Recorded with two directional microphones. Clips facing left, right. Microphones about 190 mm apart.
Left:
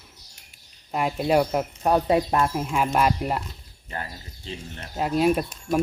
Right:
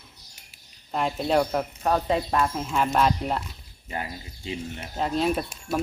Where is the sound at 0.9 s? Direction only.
5° left (ahead or behind).